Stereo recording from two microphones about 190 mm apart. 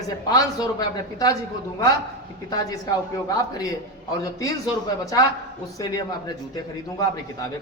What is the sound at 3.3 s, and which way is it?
Speech, 20° left (ahead or behind).